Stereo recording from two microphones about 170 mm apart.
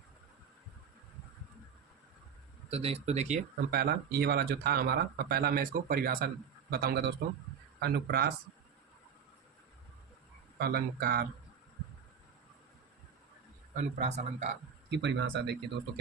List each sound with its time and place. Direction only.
2.6 s speech: 35° right (ahead or behind)
3.7 s a man's voice: 65° right (ahead or behind)
10.6 s speech: 65° right (ahead or behind)
13.7 s speech: 45° right (ahead or behind)
14.8 s speech: 90° right